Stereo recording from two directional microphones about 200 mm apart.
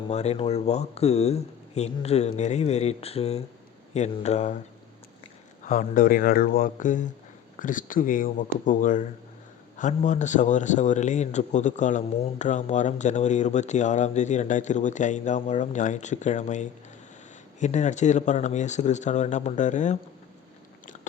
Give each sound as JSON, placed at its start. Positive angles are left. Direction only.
{"t": 0.1, "sound": "a man's voice", "side_deg": 30}
{"t": 5.6, "sound": "a man's voice", "side_deg": 40}